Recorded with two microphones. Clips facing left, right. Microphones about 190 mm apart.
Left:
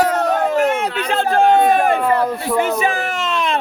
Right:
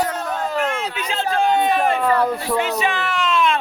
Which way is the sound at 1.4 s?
50° left (ahead or behind).